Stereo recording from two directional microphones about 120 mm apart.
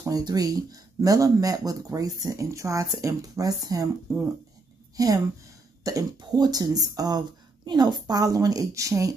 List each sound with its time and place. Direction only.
0.0 s a woman's voice: 30° right (ahead or behind)